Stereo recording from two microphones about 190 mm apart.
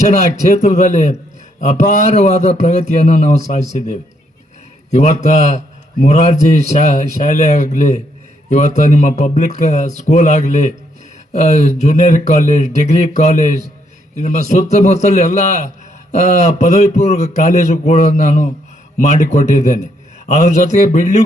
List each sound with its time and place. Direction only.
0.4 s a man's voice: 40° left (ahead or behind)